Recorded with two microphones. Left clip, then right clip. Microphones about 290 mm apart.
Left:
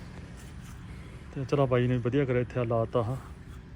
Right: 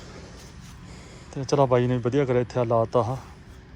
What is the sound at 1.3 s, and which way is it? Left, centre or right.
Speech, centre.